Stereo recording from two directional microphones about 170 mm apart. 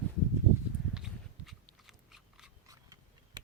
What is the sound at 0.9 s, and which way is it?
Biting, centre (ahead or behind).